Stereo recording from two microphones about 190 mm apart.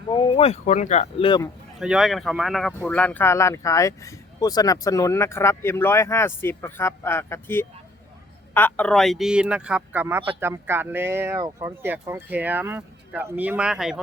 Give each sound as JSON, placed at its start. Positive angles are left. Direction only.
{"t": 0.1, "sound": "speech", "side_deg": 25}
{"t": 1.8, "sound": "a man's voice", "side_deg": 0}